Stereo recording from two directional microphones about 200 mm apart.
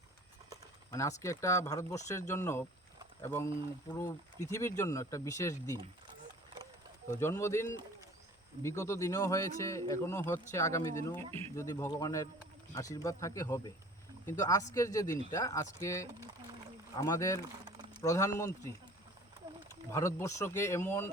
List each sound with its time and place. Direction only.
0.9 s speech: 15° left (ahead or behind)
7.1 s speech: 15° left (ahead or behind)
19.9 s speech: 15° left (ahead or behind)